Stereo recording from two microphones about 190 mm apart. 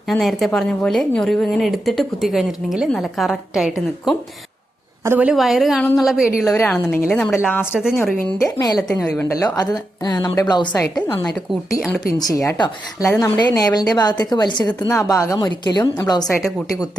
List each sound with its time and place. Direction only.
0.1 s a woman's voice: centre (ahead or behind)
6.6 s a woman's voice: 10° left (ahead or behind)
8.2 s a woman's voice: 15° left (ahead or behind)
10.7 s a woman's voice: 5° left (ahead or behind)
12.3 s a woman's voice: 15° left (ahead or behind)
15.8 s a woman's voice: 10° left (ahead or behind)